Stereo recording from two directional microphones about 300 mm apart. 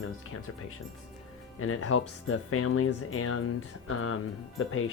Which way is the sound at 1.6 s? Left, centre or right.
Left.